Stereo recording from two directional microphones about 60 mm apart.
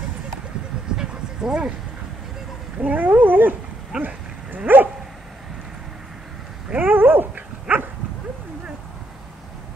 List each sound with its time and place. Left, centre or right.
0.9 s a sound: centre
2.8 s speech: right
3.9 s speech: centre
4.7 s dog: right
6.8 s dog: right